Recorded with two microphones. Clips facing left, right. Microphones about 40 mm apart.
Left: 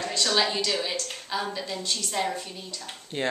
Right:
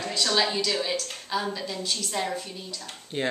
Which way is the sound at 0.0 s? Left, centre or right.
Centre.